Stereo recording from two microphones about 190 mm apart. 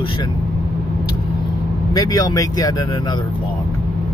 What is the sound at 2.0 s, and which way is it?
Speech, 20° left (ahead or behind).